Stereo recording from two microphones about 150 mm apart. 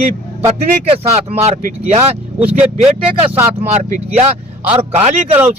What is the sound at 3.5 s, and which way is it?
Speech, 50° right (ahead or behind).